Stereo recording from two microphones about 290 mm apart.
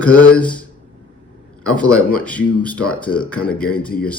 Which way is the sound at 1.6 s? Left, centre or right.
Centre.